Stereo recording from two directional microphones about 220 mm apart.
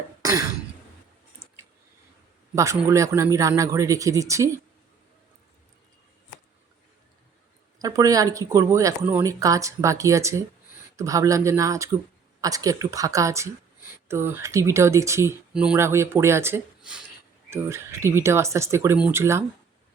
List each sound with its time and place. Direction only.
0.2 s throat clearing: 15° right (ahead or behind)
1.4 s a sound: 10° right (ahead or behind)
2.6 s speech: 15° right (ahead or behind)
7.8 s speech: 15° right (ahead or behind)